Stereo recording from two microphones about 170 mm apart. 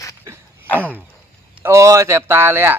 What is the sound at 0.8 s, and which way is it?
Speech, 10° right (ahead or behind).